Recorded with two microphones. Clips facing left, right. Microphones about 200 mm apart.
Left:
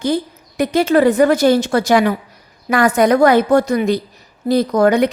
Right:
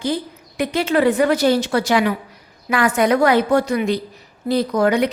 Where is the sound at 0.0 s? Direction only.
45° left (ahead or behind).